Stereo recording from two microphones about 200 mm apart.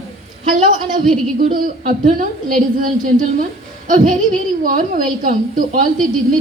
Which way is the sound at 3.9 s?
40° right (ahead or behind).